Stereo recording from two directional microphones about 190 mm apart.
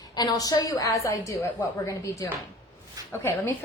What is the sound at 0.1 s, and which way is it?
A woman's voice, 20° left (ahead or behind).